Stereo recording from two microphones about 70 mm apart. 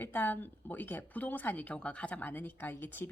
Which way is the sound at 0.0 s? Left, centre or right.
Left.